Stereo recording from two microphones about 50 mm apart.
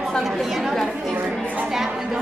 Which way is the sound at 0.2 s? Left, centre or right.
Centre.